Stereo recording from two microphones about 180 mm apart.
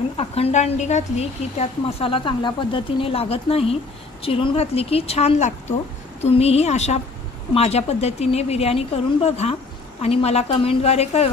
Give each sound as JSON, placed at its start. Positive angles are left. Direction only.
{"t": 0.2, "sound": "speech", "side_deg": 35}